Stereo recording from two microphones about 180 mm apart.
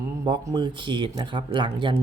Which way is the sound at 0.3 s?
25° right (ahead or behind).